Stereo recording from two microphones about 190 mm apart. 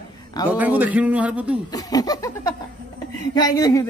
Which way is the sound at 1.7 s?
20° left (ahead or behind).